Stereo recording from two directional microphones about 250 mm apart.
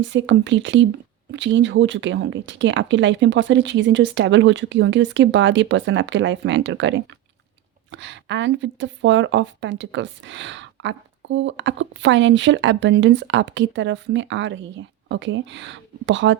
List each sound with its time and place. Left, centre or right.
0.0 s speech: right